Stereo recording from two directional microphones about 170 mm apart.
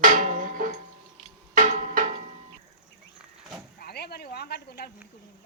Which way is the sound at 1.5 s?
45° right (ahead or behind).